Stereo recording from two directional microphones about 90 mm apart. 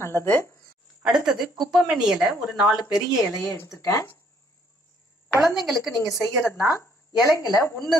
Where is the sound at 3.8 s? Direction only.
40° left (ahead or behind).